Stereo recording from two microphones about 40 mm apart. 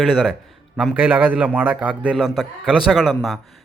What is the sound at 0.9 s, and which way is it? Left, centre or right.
Speech, right.